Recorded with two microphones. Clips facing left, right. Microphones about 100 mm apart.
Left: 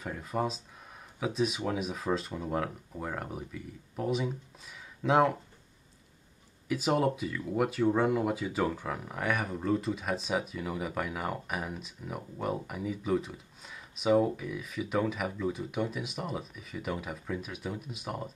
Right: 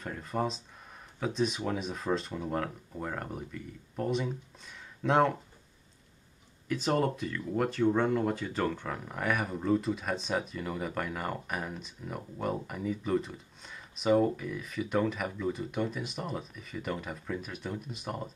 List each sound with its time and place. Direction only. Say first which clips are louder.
0.0 s speech: even; 5° left (ahead or behind)
6.7 s speech: left 1 dB; 5° left (ahead or behind)